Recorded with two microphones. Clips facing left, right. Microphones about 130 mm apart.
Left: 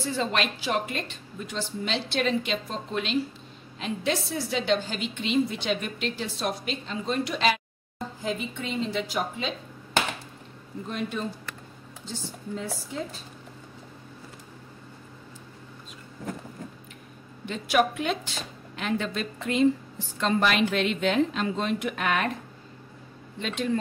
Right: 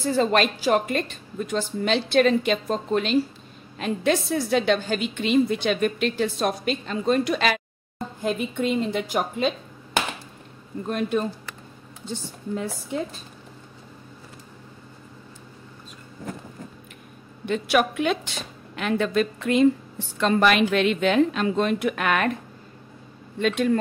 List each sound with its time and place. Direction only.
0.0 s a woman's voice: 45° right (ahead or behind)
10.9 s a woman's voice: 55° right (ahead or behind)
17.5 s a woman's voice: 70° right (ahead or behind)
23.4 s a woman's voice: 60° right (ahead or behind)